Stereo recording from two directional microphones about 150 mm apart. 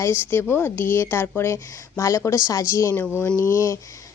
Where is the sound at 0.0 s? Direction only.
15° left (ahead or behind).